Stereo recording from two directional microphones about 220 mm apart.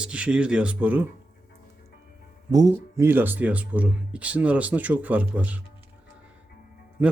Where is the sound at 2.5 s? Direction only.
15° right (ahead or behind).